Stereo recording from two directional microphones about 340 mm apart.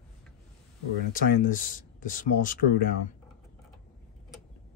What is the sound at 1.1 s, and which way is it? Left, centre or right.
Speech, left.